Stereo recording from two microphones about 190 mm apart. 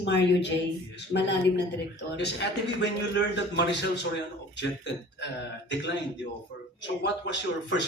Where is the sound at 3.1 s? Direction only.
65° left (ahead or behind).